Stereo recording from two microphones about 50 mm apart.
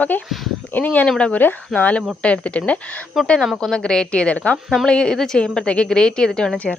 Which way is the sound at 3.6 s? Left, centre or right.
Centre.